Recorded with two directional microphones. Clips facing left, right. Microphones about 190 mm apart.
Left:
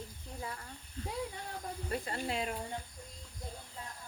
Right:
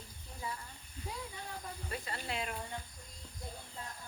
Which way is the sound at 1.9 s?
45° left (ahead or behind).